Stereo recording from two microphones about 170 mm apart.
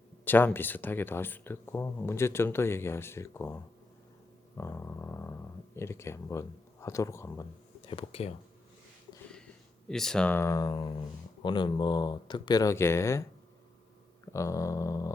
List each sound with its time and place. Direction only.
0.3 s speech: 10° left (ahead or behind)
4.5 s a sound: 15° left (ahead or behind)
5.7 s speech: 15° left (ahead or behind)
7.9 s speech: 35° left (ahead or behind)
9.9 s speech: 5° left (ahead or behind)
14.3 s speech: 20° left (ahead or behind)